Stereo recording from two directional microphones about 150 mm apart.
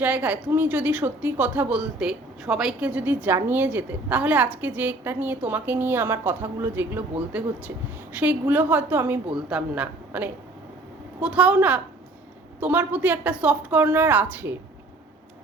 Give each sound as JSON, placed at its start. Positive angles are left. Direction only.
{"t": 0.0, "sound": "a woman's voice", "side_deg": -10}